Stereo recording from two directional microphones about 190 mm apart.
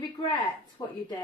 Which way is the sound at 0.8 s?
20° left (ahead or behind).